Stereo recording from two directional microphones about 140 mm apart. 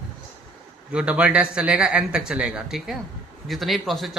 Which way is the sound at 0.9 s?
10° right (ahead or behind).